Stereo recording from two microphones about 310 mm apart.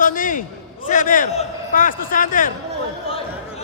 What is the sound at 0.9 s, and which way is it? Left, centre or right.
A man's voice, left.